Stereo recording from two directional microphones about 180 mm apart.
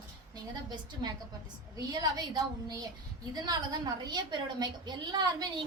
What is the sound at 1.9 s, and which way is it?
A woman's voice, 20° right (ahead or behind).